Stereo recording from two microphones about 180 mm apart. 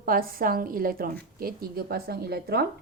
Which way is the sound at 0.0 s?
50° right (ahead or behind).